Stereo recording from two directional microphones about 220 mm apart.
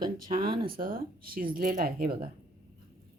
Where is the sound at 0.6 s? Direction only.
40° right (ahead or behind).